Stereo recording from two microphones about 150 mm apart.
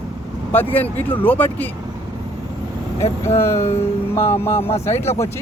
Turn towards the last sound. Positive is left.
turn(degrees=15)  # may be behind; listen again after turning